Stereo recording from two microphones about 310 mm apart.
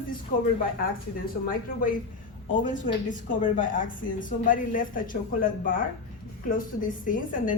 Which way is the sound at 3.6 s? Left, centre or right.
Left.